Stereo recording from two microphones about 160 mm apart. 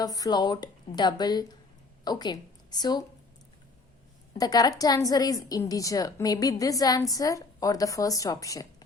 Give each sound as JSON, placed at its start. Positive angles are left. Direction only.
{"t": 0.0, "sound": "a woman's voice", "side_deg": 25}
{"t": 4.4, "sound": "a woman's voice", "side_deg": 25}